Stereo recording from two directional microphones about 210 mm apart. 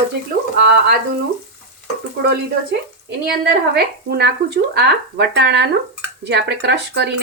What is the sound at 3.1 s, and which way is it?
Speech, 55° right (ahead or behind).